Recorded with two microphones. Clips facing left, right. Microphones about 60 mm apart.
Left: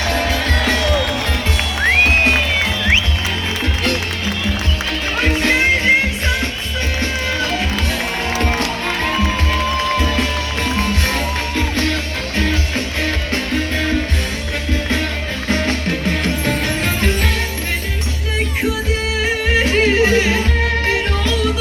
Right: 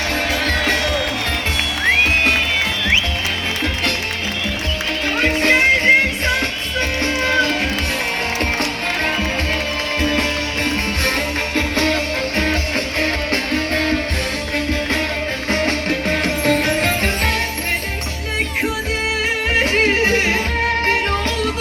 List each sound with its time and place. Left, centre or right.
0.1 s music: right
5.2 s music: right
11.5 s music: right
13.0 s music: right
19.5 s music: right